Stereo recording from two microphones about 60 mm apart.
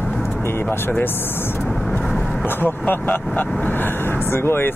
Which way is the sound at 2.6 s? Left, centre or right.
Left.